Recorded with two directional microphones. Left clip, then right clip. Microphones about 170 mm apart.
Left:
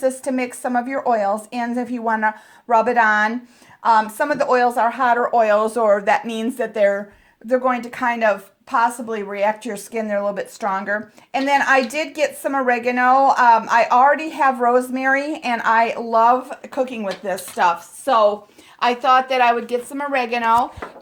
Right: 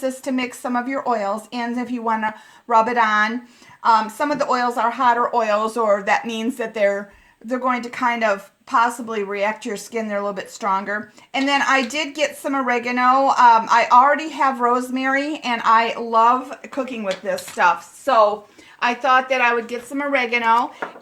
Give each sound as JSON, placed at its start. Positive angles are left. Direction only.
{"t": 0.0, "sound": "a woman's voice", "side_deg": 40}